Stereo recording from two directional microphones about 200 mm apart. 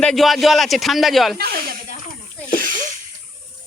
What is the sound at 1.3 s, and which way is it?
Speech, 50° right (ahead or behind).